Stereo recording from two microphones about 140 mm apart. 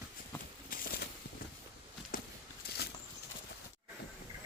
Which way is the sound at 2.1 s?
80° left.